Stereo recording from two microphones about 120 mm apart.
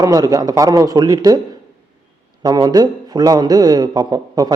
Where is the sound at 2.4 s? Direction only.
35° right (ahead or behind).